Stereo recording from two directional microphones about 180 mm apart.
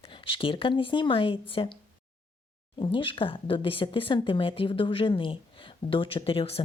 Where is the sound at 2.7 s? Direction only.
30° left (ahead or behind).